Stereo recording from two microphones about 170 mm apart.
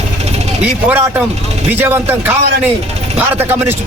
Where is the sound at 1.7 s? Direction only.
15° right (ahead or behind).